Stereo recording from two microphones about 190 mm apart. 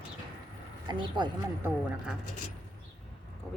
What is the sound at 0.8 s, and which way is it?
Speech, 25° right (ahead or behind).